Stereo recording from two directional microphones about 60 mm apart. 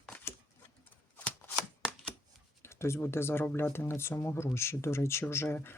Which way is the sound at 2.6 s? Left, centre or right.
Left.